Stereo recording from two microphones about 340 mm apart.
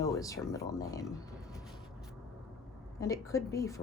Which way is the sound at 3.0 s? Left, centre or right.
Centre.